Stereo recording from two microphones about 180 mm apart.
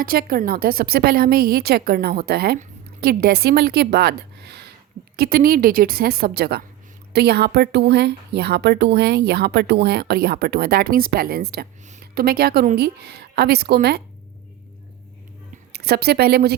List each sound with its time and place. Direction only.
0.0 s a woman's voice: 55° right (ahead or behind)
15.7 s speech: 60° right (ahead or behind)